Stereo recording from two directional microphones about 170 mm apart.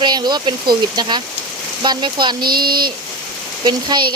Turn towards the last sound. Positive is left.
turn(degrees=-25)  # may be behind; listen again after turning